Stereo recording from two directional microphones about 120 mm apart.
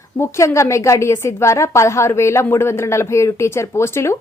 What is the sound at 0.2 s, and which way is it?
Speech, 25° left (ahead or behind).